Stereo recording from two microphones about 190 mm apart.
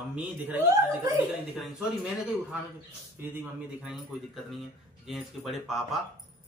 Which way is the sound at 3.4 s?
5° right (ahead or behind).